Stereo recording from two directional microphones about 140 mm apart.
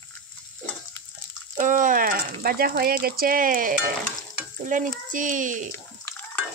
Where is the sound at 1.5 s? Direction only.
70° right (ahead or behind); by 3.8 s 90° right.